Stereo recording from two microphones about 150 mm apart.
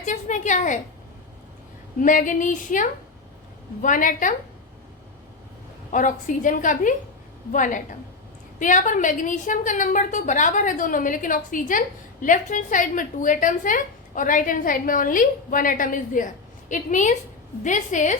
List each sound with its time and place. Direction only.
0.0 s a sound: 55° left (ahead or behind)
2.0 s a woman's voice: 60° left (ahead or behind)
5.9 s a woman's voice: 60° left (ahead or behind)